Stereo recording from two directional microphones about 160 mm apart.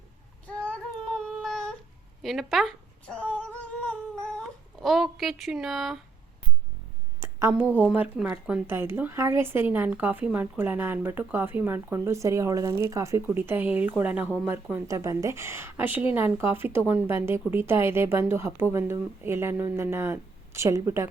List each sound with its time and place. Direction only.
0.4 s child singing: 10° left (ahead or behind)
1.2 s a sound: 5° left (ahead or behind)
2.2 s humming: centre (ahead or behind)
4.4 s speech: centre (ahead or behind)
7.2 s a woman's voice: 15° right (ahead or behind)